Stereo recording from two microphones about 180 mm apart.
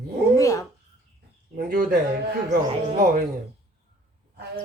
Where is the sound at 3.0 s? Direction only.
50° right (ahead or behind).